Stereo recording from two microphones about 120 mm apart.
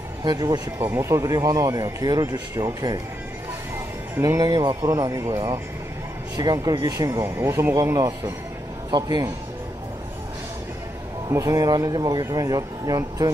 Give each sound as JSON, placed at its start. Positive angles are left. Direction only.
{"t": 0.2, "sound": "speech", "side_deg": -35}
{"t": 0.8, "sound": "speech", "side_deg": -20}
{"t": 4.2, "sound": "speech", "side_deg": -30}
{"t": 11.2, "sound": "speech", "side_deg": -25}